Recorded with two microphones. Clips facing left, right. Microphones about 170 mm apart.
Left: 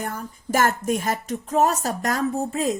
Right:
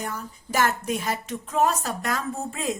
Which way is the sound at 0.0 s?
50° left (ahead or behind).